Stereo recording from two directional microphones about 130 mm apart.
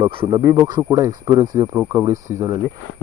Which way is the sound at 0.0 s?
45° right (ahead or behind).